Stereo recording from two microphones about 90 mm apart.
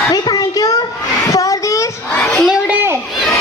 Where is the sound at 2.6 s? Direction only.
25° right (ahead or behind).